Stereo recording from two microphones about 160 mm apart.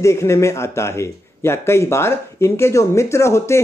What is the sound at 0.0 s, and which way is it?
A man's voice, 15° left (ahead or behind).